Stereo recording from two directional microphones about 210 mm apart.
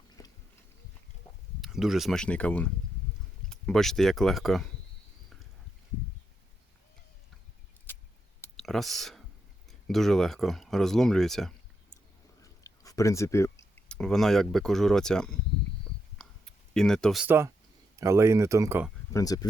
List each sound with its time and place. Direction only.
0.2 s biting: 15° left (ahead or behind)
1.6 s speech: centre (ahead or behind)
7.9 s a sound: 10° left (ahead or behind)
8.4 s clicking: centre (ahead or behind)
9.6 s speech: centre (ahead or behind)
12.4 s chewing: 15° left (ahead or behind)
13.7 s speech: 5° left (ahead or behind)
16.1 s clicking: 5° left (ahead or behind)
18.0 s speech: 15° right (ahead or behind)
19.1 s speech: 15° left (ahead or behind)